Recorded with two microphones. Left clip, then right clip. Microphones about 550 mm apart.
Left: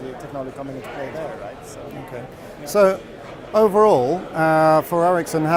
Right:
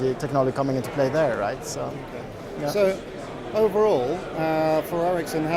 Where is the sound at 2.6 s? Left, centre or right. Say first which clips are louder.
Left 6 dB; left.